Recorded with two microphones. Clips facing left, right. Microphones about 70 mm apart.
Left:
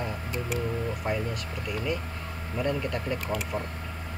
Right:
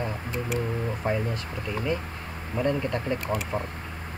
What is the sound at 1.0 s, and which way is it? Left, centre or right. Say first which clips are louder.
Speech: right 2 dB; right.